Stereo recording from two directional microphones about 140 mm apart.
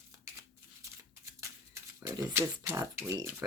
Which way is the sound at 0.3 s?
20° right (ahead or behind).